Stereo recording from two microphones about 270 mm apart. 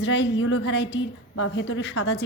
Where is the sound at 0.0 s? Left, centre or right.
Left.